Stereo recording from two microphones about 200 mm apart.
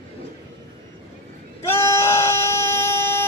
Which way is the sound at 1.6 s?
10° left (ahead or behind).